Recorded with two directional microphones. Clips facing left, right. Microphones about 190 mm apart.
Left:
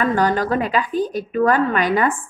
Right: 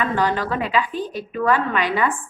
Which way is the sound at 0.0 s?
40° left (ahead or behind).